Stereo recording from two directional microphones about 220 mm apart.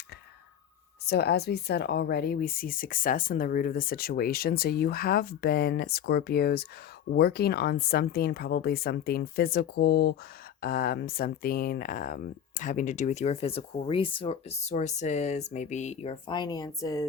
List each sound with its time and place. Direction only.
1.0 s speech: 45° left (ahead or behind); by 17.1 s 15° left (ahead or behind)